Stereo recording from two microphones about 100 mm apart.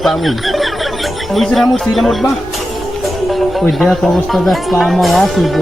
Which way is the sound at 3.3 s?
Centre (ahead or behind).